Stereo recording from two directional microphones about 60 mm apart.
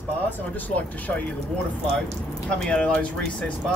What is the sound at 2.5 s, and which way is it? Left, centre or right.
Speech, centre.